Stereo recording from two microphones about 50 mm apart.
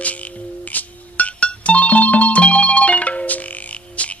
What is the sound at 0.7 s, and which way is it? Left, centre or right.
Music, left.